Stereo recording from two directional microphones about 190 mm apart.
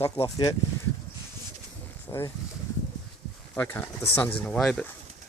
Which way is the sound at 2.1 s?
20° left (ahead or behind).